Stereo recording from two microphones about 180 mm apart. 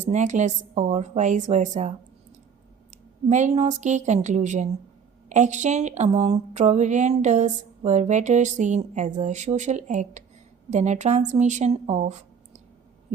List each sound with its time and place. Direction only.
0.0 s speech: 40° right (ahead or behind)
2.9 s a woman's voice: 40° right (ahead or behind)